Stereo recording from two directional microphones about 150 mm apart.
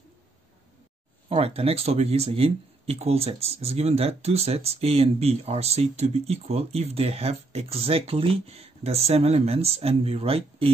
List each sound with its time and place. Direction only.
1.3 s speech: 40° right (ahead or behind)